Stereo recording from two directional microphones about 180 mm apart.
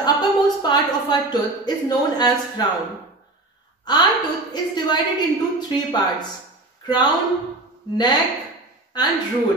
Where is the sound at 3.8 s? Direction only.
25° left (ahead or behind).